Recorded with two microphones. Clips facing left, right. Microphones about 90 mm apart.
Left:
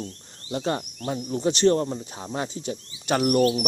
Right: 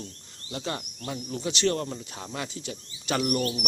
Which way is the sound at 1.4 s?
45° left (ahead or behind).